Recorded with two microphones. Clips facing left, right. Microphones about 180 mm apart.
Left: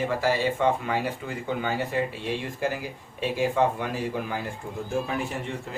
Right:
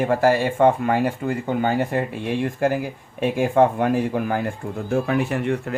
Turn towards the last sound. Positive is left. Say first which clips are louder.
# right 10 dB
turn(degrees=-65)  # may be behind; listen again after turning